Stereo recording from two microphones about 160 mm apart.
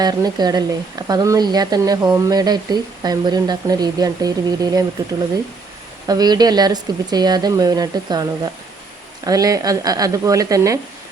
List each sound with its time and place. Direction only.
0.0 s speech: 25° right (ahead or behind)
6.1 s speech: 25° right (ahead or behind)